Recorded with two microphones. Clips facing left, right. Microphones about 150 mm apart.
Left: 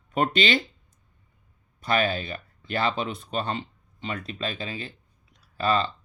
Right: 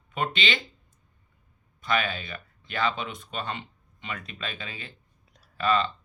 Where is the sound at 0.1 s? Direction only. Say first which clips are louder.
Left 6 dB; 40° left (ahead or behind).